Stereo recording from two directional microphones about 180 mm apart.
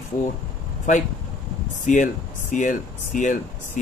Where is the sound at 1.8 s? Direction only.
45° left (ahead or behind).